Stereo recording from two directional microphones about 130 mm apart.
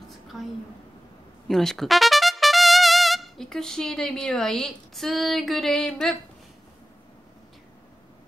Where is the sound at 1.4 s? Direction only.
Centre (ahead or behind).